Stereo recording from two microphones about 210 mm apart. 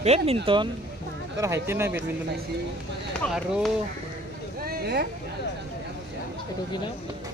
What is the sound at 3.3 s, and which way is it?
Speech, centre (ahead or behind).